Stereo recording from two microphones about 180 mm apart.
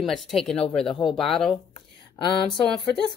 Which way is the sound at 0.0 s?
Centre (ahead or behind).